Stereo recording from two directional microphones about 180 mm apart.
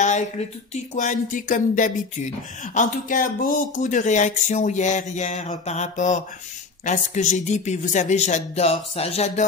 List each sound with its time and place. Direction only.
0.0 s a man's voice: 40° left (ahead or behind)